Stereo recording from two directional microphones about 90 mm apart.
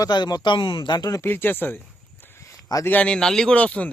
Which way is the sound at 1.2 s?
25° left (ahead or behind).